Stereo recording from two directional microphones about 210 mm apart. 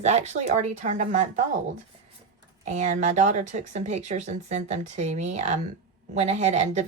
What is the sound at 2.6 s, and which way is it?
Speech, 35° right (ahead or behind).